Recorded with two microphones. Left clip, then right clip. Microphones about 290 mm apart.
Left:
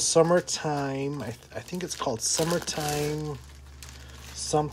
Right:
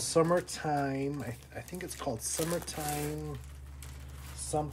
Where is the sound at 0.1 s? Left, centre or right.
Centre.